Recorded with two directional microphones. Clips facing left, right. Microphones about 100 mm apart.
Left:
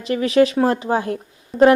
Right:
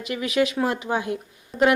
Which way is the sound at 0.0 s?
35° left (ahead or behind).